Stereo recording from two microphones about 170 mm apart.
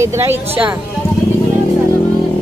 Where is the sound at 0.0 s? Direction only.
15° right (ahead or behind).